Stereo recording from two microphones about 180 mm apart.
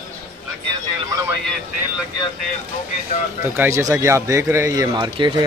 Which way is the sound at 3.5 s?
15° right (ahead or behind).